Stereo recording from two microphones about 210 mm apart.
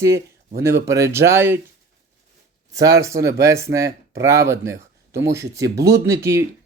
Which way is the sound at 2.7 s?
15° right (ahead or behind).